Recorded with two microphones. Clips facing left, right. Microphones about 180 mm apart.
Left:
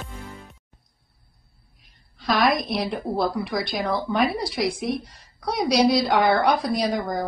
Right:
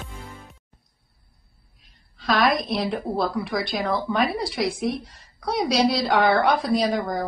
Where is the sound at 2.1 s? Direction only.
Centre (ahead or behind).